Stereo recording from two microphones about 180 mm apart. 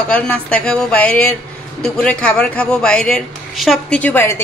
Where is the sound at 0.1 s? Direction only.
5° left (ahead or behind).